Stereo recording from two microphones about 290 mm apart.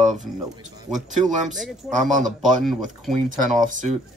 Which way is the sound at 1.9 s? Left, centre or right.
Right.